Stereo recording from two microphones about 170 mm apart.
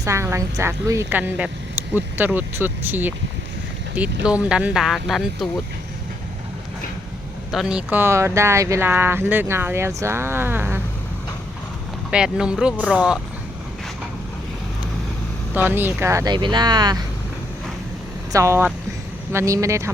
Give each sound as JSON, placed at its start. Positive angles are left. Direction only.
{"t": 0.0, "sound": "speech", "side_deg": -15}
{"t": 7.5, "sound": "speech", "side_deg": -5}
{"t": 12.1, "sound": "speech", "side_deg": -5}
{"t": 15.5, "sound": "speech", "side_deg": -10}
{"t": 18.3, "sound": "speech", "side_deg": -20}